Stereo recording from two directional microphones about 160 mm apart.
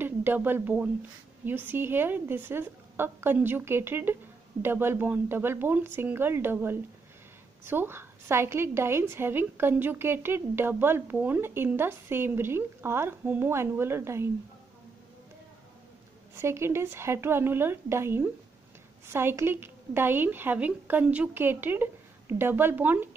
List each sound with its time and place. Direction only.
0.0 s a woman's voice: 15° right (ahead or behind)
16.3 s a woman's voice: 15° right (ahead or behind)